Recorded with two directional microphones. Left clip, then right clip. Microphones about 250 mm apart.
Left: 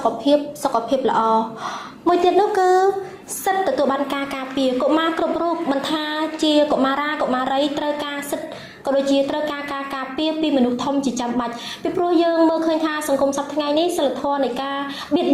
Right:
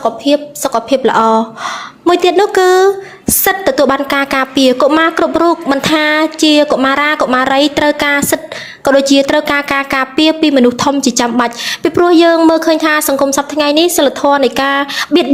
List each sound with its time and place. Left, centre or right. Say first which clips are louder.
0.0 s a woman's voice: right 5 dB; right